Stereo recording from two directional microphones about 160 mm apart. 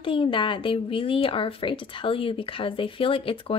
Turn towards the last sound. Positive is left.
turn(degrees=35)  # may be behind; listen again after turning